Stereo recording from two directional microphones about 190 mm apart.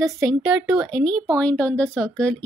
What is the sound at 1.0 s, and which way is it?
Speech, 20° right (ahead or behind).